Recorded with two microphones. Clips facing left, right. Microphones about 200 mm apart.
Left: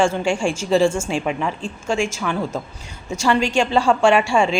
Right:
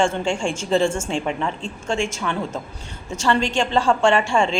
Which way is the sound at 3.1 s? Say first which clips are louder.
Left 2 dB; 10° left (ahead or behind).